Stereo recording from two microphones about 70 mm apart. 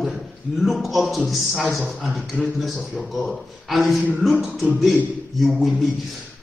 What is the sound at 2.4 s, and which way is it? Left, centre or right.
Speech, left.